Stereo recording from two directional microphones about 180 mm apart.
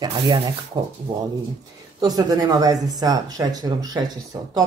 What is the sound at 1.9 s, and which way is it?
Speech, 20° right (ahead or behind).